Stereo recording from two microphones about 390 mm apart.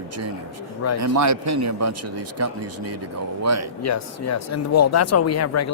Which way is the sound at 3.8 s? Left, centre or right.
Left.